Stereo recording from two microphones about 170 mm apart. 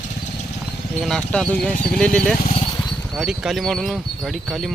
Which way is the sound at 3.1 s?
Centre (ahead or behind).